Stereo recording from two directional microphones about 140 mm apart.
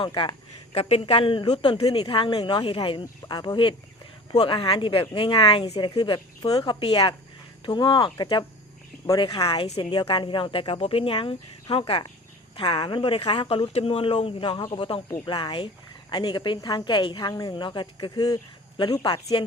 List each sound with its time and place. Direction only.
0.0 s speech: 35° left (ahead or behind)